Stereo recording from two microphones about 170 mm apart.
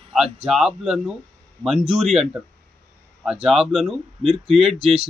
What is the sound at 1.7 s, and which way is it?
Speech, 35° right (ahead or behind).